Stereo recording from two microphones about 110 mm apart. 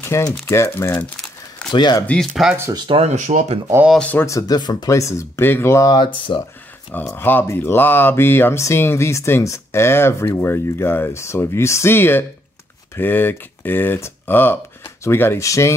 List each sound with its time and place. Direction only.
0.0 s speech: 25° left (ahead or behind)
1.7 s speech: 40° left (ahead or behind)
2.4 s speech: centre (ahead or behind)
3.0 s speech: 90° right
4.0 s speech: 15° left (ahead or behind)
4.3 s speech: 30° left (ahead or behind)
4.6 s speech: 40° left (ahead or behind)
4.9 s speech: 25° left (ahead or behind)
5.9 s speech: 45° left (ahead or behind)
7.2 s speech: 20° left (ahead or behind)